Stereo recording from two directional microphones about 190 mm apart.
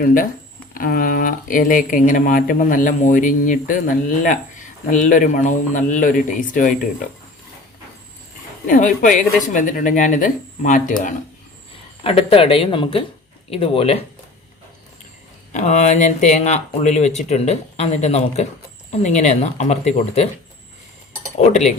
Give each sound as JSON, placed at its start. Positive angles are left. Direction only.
{"t": 0.0, "sound": "speech", "side_deg": 45}
{"t": 8.6, "sound": "speech", "side_deg": 45}
{"t": 12.0, "sound": "speech", "side_deg": 30}
{"t": 15.5, "sound": "speech", "side_deg": 40}
{"t": 21.3, "sound": "speech", "side_deg": 35}